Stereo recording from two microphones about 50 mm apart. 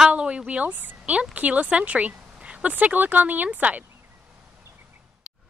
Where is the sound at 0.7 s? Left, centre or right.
Right.